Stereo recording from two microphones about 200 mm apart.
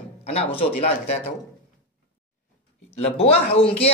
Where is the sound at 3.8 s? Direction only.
30° left (ahead or behind).